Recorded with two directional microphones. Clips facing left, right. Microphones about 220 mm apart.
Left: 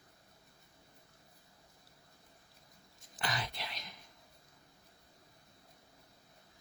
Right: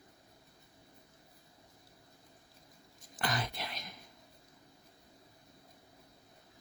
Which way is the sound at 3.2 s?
50° right (ahead or behind).